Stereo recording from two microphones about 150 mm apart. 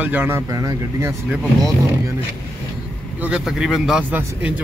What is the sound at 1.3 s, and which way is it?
Speech, centre (ahead or behind).